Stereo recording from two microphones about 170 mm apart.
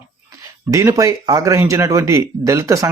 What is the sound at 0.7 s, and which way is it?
Speech, 20° right (ahead or behind).